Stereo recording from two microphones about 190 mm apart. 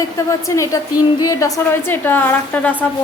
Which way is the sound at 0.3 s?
15° left (ahead or behind).